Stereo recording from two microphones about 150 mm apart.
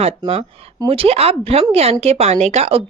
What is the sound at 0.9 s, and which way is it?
A woman's voice, 40° right (ahead or behind).